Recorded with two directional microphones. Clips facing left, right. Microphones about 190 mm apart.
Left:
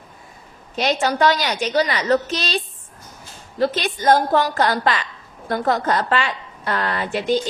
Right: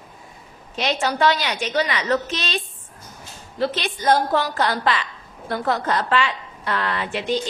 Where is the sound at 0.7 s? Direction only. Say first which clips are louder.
Left 3 dB; 45° left (ahead or behind).